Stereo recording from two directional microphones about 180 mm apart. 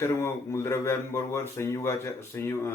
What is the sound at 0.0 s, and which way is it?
Speech, 15° left (ahead or behind).